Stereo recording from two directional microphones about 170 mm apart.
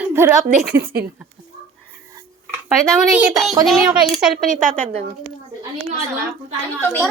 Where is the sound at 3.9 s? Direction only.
5° right (ahead or behind).